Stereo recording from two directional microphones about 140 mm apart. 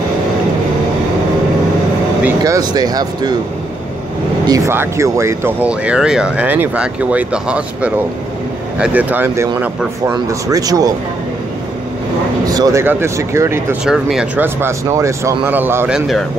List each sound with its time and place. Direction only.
2.4 s speech: 25° right (ahead or behind)
4.5 s speech: 20° right (ahead or behind)
12.4 s speech: 25° right (ahead or behind)
13.8 s speech: 5° right (ahead or behind)
14.4 s speech: 20° right (ahead or behind)